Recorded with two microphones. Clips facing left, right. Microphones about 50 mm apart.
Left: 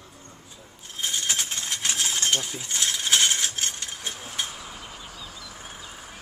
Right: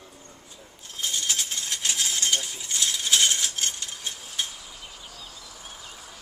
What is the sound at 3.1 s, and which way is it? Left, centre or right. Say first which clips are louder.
Coin: left 1 dB; left.